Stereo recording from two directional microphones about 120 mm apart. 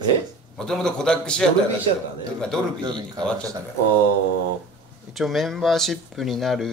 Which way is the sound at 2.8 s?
40° right (ahead or behind).